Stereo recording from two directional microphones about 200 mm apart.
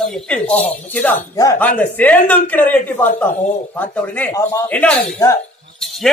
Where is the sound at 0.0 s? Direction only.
5° left (ahead or behind).